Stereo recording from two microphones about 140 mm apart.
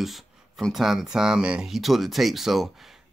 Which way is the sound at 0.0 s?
Centre (ahead or behind).